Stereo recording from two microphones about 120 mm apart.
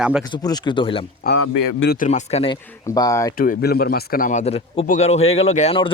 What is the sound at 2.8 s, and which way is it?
Speech, 30° left (ahead or behind).